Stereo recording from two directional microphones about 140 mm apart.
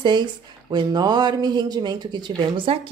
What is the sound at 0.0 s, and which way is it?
Speech, 30° right (ahead or behind).